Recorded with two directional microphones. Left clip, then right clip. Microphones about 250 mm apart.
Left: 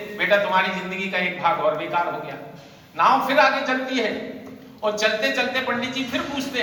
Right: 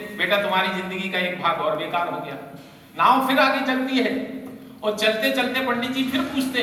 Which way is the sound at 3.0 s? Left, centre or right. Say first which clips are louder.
Even; left.